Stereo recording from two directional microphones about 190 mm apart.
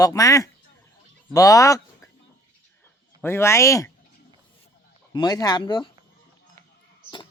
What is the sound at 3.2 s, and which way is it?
Speech, 15° left (ahead or behind).